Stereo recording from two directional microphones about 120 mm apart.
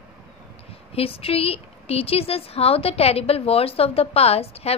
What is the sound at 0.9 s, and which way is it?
A woman's voice, 55° left (ahead or behind).